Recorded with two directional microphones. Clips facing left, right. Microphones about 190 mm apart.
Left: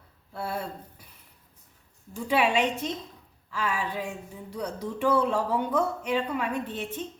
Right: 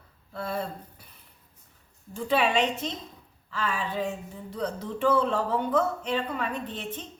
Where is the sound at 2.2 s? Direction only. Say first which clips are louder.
Even; 10° left (ahead or behind).